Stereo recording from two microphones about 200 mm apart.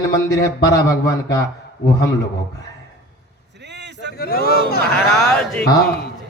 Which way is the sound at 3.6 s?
60° right (ahead or behind).